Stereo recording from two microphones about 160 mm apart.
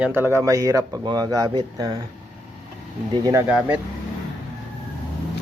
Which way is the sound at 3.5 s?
10° right (ahead or behind).